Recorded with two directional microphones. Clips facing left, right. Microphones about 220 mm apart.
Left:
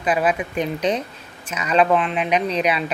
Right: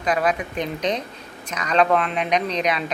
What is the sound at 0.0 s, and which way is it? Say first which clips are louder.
A woman's voice: left 2 dB; 5° left (ahead or behind).